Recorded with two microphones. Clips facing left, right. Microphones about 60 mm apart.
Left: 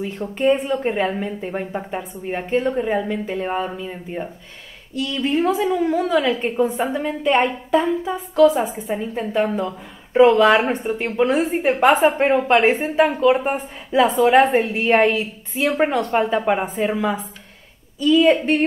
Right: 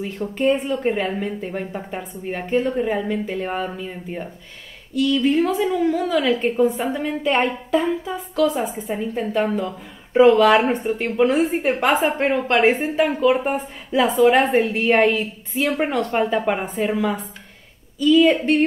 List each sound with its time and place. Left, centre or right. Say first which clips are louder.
0.2 s a woman's voice: left 1 dB; centre
5.2 s a woman's voice: even; centre
9.4 s a woman's voice: left 2 dB; centre
10.1 s a woman's voice: even; centre